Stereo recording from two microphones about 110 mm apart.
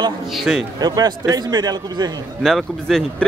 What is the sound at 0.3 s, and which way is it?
Speech, centre (ahead or behind).